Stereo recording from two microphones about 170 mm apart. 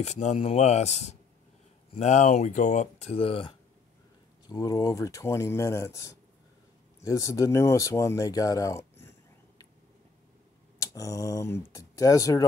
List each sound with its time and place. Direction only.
0.0 s speech: 40° left (ahead or behind)
4.5 s speech: 20° left (ahead or behind)
10.8 s speech: 20° left (ahead or behind)